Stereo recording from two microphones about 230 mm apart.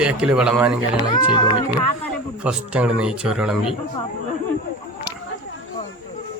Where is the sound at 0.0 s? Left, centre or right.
Centre.